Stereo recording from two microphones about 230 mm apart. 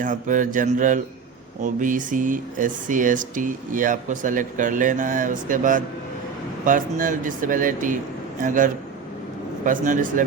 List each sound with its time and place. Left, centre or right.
0.0 s speech: right